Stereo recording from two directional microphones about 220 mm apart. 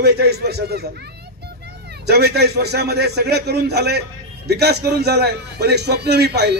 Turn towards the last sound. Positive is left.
turn(degrees=-50)  # may be behind; listen again after turning